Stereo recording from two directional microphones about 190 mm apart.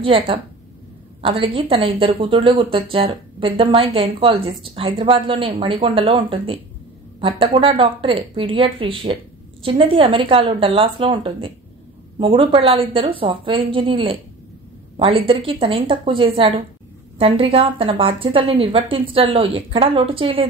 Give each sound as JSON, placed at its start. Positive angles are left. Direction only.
{"t": 0.0, "sound": "speech", "side_deg": -30}